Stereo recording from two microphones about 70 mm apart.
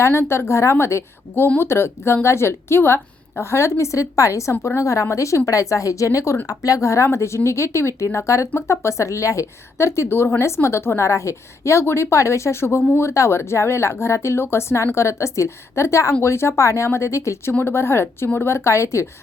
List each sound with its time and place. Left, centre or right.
0.0 s a woman's voice: left